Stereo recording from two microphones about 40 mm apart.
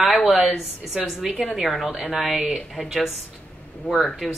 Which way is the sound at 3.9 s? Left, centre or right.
Centre.